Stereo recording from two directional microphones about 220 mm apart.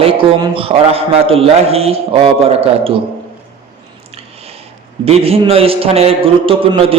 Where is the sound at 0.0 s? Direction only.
25° right (ahead or behind).